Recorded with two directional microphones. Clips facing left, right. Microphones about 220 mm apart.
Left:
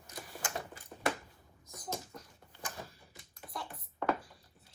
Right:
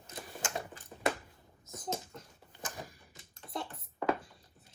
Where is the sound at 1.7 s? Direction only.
25° right (ahead or behind).